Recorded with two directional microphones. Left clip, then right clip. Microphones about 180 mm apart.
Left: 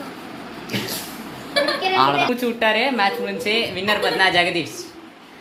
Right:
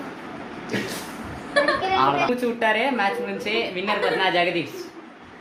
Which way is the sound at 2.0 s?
25° left (ahead or behind).